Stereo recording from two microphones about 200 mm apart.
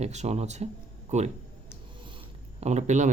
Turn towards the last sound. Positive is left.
turn(degrees=-35)  # may be behind; listen again after turning